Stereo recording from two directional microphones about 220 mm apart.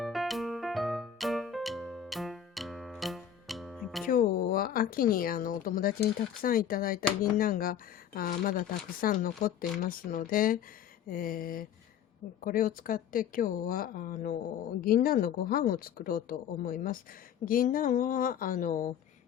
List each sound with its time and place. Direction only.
0.0 s music: centre (ahead or behind)
4.0 s speech: 40° left (ahead or behind)